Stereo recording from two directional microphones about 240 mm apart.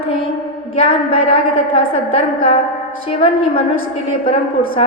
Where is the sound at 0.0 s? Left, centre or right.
Left.